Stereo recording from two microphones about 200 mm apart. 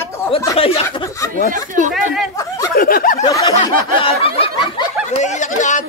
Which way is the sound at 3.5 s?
30° left (ahead or behind).